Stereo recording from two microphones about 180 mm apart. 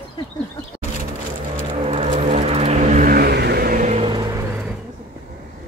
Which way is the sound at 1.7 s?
35° right (ahead or behind).